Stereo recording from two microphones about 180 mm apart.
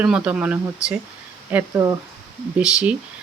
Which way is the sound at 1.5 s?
20° right (ahead or behind).